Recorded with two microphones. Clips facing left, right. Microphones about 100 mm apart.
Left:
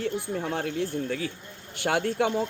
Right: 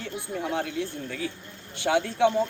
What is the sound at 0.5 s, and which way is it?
Speech, 45° left (ahead or behind).